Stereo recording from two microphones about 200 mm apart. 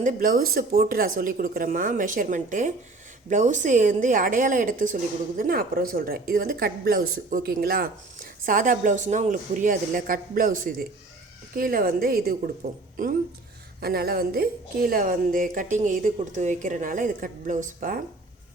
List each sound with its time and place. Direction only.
0.0 s a woman's voice: 45° right (ahead or behind)
13.8 s speech: 50° right (ahead or behind)